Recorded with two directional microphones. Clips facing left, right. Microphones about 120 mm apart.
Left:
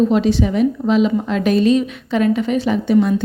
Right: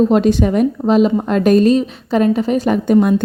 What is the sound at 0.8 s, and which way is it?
A woman's voice, 40° right (ahead or behind).